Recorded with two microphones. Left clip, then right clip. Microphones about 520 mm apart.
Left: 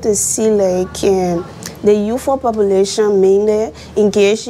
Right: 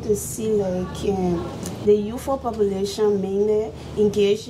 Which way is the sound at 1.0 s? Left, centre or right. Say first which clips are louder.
Left 9 dB; left.